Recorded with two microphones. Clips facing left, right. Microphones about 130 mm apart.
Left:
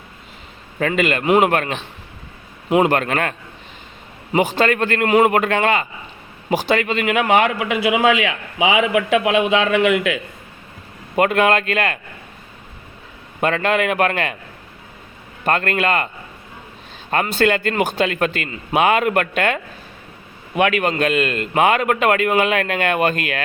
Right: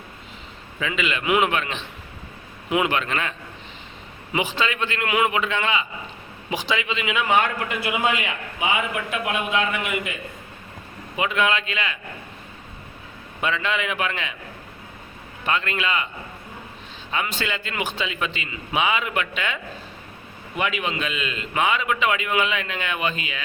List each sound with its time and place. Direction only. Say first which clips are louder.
0.8 s speech: left 7 dB; 50° left (ahead or behind)
5.3 s a man's voice: left 7 dB; 55° left (ahead or behind); by 10.2 s 90° left
11.2 s speech: left 7 dB; 55° left (ahead or behind)
13.4 s speech: left 7 dB; 50° left (ahead or behind)
15.4 s speech: left 6 dB; 50° left (ahead or behind)
17.1 s a man's voice: left 10 dB; 55° left (ahead or behind)